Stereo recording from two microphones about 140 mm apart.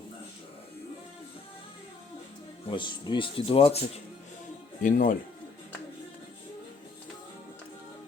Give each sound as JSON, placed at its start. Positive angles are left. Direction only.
{"t": 2.6, "sound": "speech", "side_deg": 35}
{"t": 4.8, "sound": "speech", "side_deg": 65}